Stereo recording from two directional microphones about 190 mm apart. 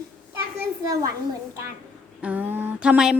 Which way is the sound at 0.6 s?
15° right (ahead or behind).